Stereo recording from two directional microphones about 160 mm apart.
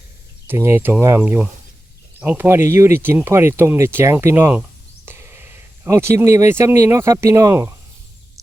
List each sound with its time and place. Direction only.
0.4 s speech: 15° right (ahead or behind)